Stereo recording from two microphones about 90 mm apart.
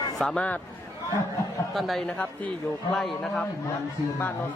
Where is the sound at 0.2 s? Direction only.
5° left (ahead or behind).